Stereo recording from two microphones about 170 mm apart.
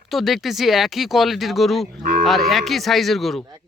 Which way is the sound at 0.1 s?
Centre (ahead or behind).